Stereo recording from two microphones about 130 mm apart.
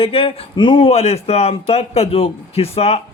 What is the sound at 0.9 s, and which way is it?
A man's voice, 55° left (ahead or behind).